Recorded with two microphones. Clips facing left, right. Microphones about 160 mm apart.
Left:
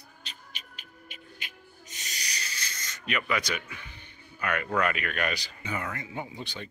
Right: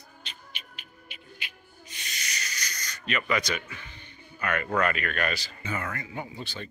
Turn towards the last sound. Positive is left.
turn(degrees=15)  # may be behind; listen again after turning